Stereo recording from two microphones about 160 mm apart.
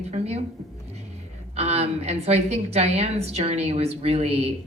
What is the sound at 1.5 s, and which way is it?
A woman's voice, 40° right (ahead or behind).